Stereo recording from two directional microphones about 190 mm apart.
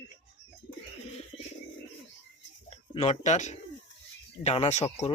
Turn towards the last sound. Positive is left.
turn(degrees=30)  # may be behind; listen again after turning